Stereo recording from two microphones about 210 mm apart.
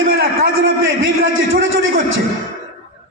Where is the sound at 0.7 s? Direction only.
70° right (ahead or behind).